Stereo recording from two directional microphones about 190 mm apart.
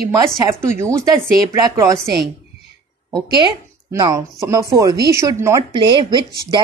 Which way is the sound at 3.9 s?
20° right (ahead or behind).